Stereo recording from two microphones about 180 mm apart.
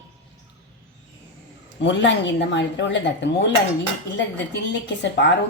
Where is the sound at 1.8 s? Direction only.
85° left.